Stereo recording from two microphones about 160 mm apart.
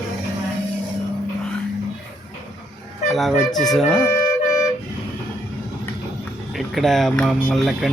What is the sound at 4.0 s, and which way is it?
Music, 20° left (ahead or behind).